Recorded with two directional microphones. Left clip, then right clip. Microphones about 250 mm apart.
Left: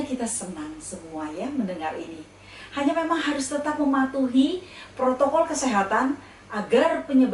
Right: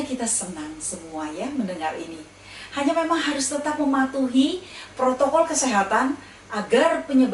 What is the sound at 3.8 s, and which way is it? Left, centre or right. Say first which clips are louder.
A woman's voice: right 1 dB; centre.